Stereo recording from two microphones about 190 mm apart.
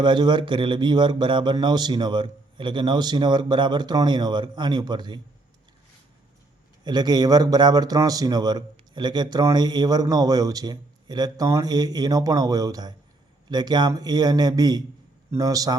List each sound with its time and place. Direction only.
0.0 s a man's voice: 25° right (ahead or behind)
6.8 s a man's voice: 20° right (ahead or behind)